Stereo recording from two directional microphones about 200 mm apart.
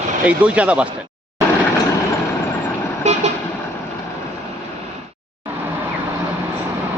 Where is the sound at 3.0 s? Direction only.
35° right (ahead or behind).